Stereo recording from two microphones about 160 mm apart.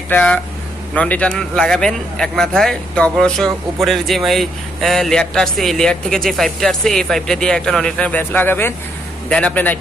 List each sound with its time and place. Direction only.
0.1 s a man's voice: 5° left (ahead or behind)